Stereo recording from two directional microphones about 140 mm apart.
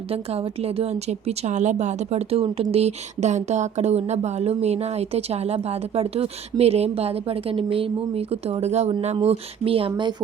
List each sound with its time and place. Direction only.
0.1 s a woman's voice: 45° right (ahead or behind)